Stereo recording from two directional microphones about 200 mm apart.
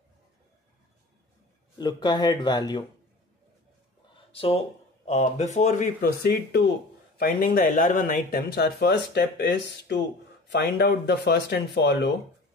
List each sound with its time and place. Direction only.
1.8 s speech: 20° left (ahead or behind)
4.3 s speech: 30° left (ahead or behind)
5.9 s speech: 55° left (ahead or behind)